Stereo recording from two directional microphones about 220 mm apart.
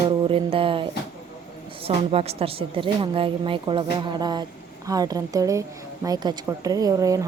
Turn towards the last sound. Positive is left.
turn(degrees=-15)  # may be behind; listen again after turning